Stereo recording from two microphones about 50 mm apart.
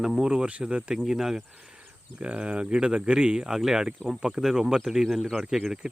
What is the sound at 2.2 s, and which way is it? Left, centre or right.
Speech, right.